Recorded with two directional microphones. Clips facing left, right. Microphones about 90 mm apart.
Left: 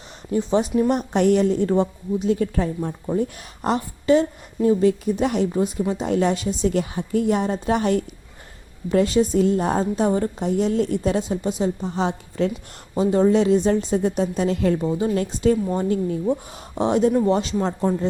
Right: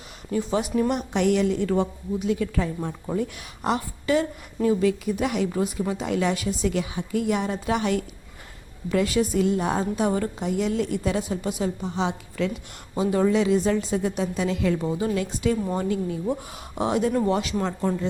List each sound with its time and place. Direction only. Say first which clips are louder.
0.3 s a woman's voice: left 4 dB; 30° left (ahead or behind)
6.7 s a woman's voice: left 4 dB; 40° left (ahead or behind)
11.9 s a woman's voice: left 3 dB; 40° left (ahead or behind)